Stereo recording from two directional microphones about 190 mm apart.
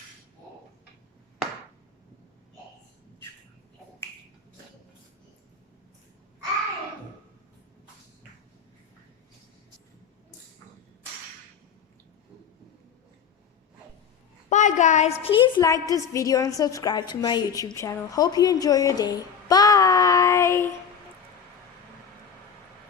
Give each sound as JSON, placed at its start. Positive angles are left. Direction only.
{"t": 14.5, "sound": "a woman's voice", "side_deg": 40}
{"t": 15.2, "sound": "a woman's voice", "side_deg": 25}